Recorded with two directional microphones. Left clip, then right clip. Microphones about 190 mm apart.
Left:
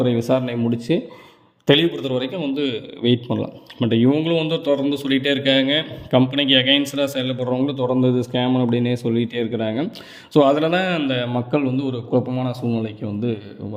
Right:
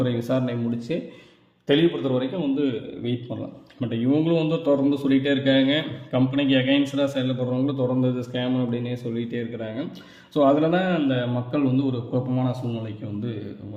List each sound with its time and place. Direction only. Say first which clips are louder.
0.0 s a man's voice: left 5 dB; 35° left (ahead or behind)